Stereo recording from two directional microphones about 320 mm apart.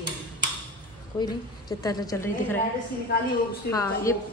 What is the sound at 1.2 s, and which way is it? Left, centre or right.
A woman's voice, centre.